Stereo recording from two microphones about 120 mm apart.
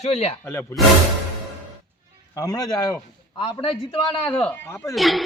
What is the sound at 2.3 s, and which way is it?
Speech, 30° left (ahead or behind).